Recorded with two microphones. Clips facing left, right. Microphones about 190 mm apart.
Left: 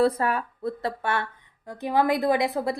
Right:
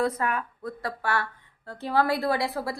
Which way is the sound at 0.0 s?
30° left (ahead or behind).